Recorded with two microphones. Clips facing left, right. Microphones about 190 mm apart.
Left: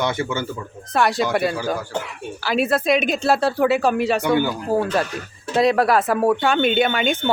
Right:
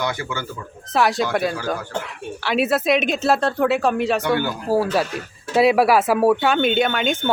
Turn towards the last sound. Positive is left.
turn(degrees=0)  # may be behind; listen again after turning